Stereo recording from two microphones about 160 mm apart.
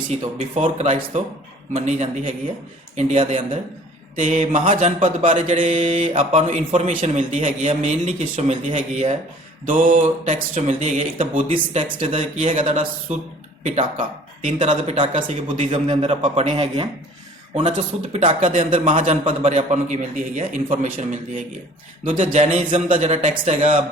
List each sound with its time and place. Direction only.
0.1 s speech: 45° right (ahead or behind)
14.4 s a man's voice: 40° right (ahead or behind)
15.1 s a man's voice: 45° right (ahead or behind)
18.3 s speech: 50° right (ahead or behind)
22.4 s speech: 40° right (ahead or behind)